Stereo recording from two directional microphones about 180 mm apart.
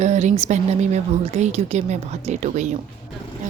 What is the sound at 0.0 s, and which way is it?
A woman's voice, 40° right (ahead or behind).